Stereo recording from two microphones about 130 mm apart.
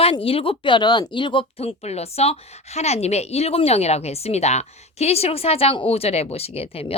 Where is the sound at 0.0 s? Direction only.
45° left (ahead or behind).